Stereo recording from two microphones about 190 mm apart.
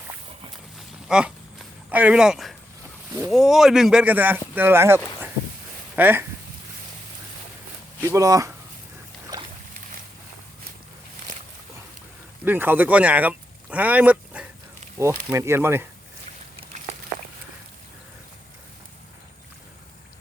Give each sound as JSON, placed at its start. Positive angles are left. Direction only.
{"t": 0.8, "sound": "a sound", "side_deg": -5}
{"t": 3.1, "sound": "speech", "side_deg": -15}
{"t": 3.3, "sound": "speech", "side_deg": 0}
{"t": 8.0, "sound": "speech", "side_deg": -15}
{"t": 9.3, "sound": "boat", "side_deg": -20}
{"t": 12.5, "sound": "speech", "side_deg": -10}